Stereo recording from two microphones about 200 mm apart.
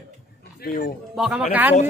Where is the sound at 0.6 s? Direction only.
45° left (ahead or behind).